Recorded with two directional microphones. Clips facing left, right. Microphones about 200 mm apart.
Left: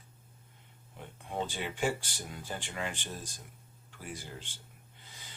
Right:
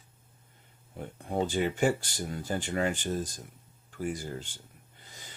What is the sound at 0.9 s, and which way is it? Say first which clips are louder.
Speech: right 6 dB; 45° right (ahead or behind).